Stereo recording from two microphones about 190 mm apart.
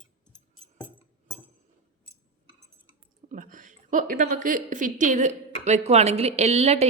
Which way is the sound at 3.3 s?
45° right (ahead or behind).